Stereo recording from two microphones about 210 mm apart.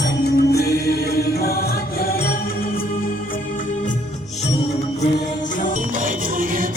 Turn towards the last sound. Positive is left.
turn(degrees=-40)  # may be behind; listen again after turning